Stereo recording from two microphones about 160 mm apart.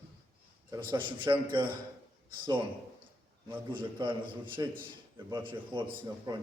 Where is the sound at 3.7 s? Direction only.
30° right (ahead or behind).